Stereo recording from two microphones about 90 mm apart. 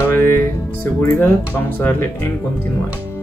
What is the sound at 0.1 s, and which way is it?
Music, 25° left (ahead or behind).